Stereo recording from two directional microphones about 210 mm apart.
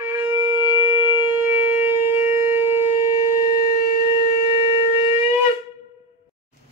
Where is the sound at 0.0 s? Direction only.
10° right (ahead or behind).